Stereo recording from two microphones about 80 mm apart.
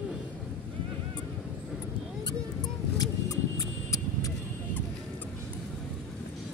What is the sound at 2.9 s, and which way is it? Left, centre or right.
Vehicle, left.